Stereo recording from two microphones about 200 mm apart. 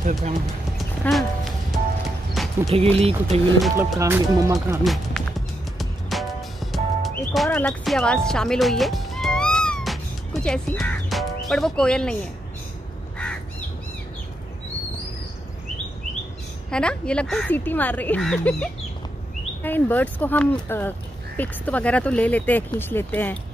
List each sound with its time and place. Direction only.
0.0 s speech: 40° right (ahead or behind)
0.7 s music: centre (ahead or behind)
3.0 s speech: 30° right (ahead or behind)
4.0 s speech: 15° right (ahead or behind)
4.8 s speech: centre (ahead or behind)
5.8 s music: centre (ahead or behind)
7.4 s speech: 5° left (ahead or behind)
16.7 s speech: 5° left (ahead or behind)